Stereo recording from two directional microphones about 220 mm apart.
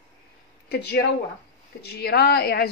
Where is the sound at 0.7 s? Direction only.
50° left (ahead or behind).